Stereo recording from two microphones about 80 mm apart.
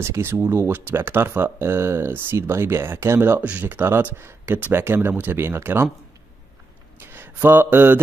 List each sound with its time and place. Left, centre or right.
0.0 s speech: right
7.0 s mantra: right